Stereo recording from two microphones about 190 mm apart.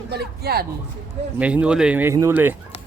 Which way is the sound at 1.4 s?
5° right (ahead or behind).